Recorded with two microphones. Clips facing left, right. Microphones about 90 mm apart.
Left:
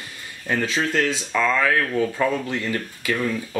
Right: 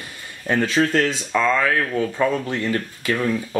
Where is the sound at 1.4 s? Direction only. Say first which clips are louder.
Right 1 dB; 25° right (ahead or behind).